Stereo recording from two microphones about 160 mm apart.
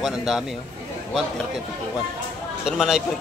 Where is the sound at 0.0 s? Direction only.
Centre (ahead or behind).